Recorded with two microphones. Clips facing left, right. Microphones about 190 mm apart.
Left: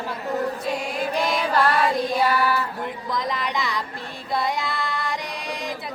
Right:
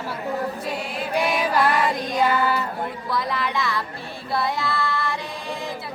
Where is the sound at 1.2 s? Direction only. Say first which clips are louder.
Right 2 dB; 10° right (ahead or behind).